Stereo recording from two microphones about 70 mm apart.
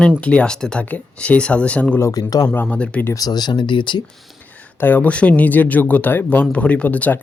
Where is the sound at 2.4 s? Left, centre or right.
Left.